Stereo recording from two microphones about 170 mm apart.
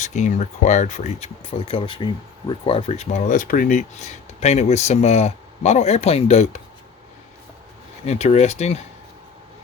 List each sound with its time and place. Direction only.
0.0 s speech: 45° left (ahead or behind)
8.0 s speech: 40° left (ahead or behind)